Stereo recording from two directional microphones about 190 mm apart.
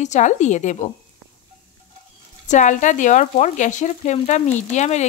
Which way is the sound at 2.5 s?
40° left (ahead or behind).